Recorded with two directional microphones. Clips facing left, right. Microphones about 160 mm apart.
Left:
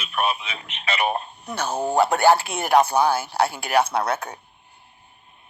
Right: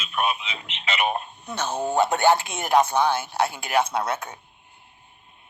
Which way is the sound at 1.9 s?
30° left (ahead or behind).